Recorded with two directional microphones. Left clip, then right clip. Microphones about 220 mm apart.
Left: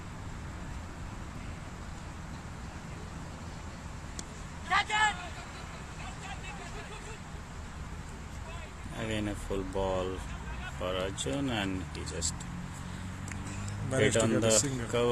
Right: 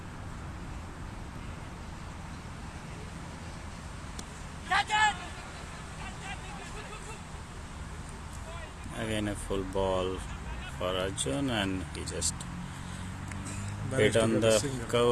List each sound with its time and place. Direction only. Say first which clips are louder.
4.7 s vehicle: right 1 dB; 50° right (ahead or behind)
9.0 s speech: right 2 dB; 15° right (ahead or behind)
14.0 s speech: right 2 dB; 10° right (ahead or behind)